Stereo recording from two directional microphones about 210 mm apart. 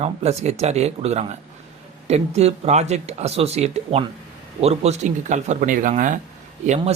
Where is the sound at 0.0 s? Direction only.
30° right (ahead or behind).